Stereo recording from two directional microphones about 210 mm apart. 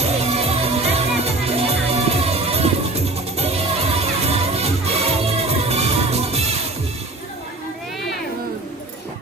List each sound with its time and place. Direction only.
0.0 s music: 30° right (ahead or behind)